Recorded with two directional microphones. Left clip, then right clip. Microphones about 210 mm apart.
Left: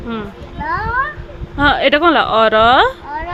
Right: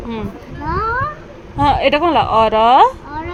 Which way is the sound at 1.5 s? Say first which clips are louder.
Left 1 dB; 20° left (ahead or behind).